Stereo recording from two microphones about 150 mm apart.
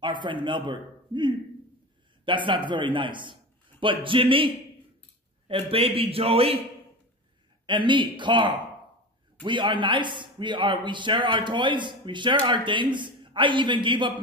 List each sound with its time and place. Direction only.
0.0 s a man's voice: 30° right (ahead or behind)
5.5 s a man's voice: 40° right (ahead or behind)
7.6 s a man's voice: 30° right (ahead or behind)